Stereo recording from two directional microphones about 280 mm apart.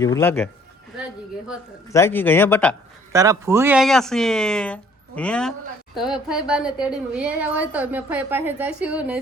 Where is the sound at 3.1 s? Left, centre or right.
Centre.